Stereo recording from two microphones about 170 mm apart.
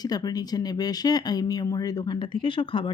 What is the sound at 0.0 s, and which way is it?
Speech, 25° left (ahead or behind).